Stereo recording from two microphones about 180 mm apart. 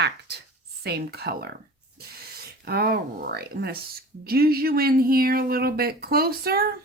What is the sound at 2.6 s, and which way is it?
Speech, 60° right (ahead or behind).